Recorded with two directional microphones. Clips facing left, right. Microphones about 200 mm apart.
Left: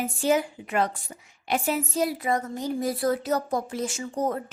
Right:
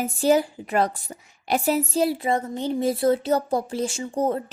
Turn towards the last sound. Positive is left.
turn(degrees=-30)  # may be behind; listen again after turning